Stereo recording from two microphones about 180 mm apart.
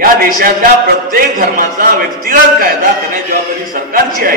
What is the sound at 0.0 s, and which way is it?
A man's voice, 50° right (ahead or behind).